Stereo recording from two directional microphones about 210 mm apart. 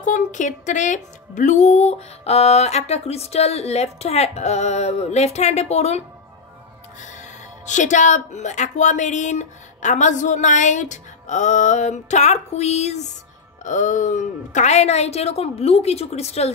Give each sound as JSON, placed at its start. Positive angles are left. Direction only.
{"t": 0.0, "sound": "speech", "side_deg": 35}